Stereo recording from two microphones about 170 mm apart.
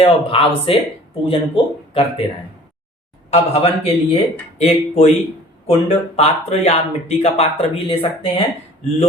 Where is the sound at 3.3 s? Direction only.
35° left (ahead or behind).